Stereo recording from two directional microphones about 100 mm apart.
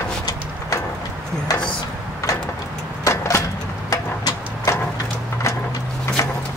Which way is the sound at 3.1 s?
30° left (ahead or behind).